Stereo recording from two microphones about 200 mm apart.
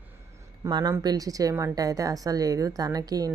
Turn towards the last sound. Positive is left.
turn(degrees=-20)  # may be behind; listen again after turning